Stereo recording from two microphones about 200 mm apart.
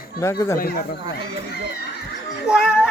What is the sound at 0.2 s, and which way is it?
Speech, 15° left (ahead or behind).